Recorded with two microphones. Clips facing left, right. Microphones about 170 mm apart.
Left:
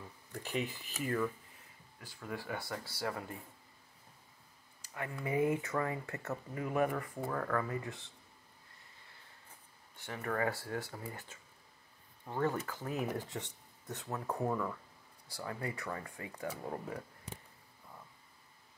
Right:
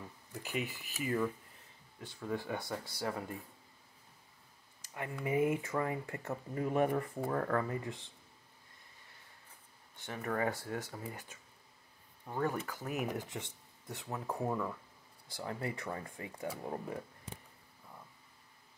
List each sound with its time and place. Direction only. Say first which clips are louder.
0.3 s speech: left 1 dB; 5° right (ahead or behind)
2.2 s speech: right 3 dB; 20° right (ahead or behind)
5.2 s speech: right 1 dB; 20° right (ahead or behind)
9.9 s speech: even; 15° right (ahead or behind)
15.2 s speech: right 1 dB; 25° right (ahead or behind)
16.4 s speech: right 1 dB; 10° right (ahead or behind)